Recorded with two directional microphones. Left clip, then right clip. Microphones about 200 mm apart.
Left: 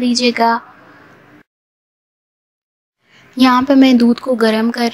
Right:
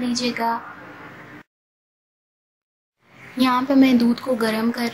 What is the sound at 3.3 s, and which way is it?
A woman's voice, 40° left (ahead or behind).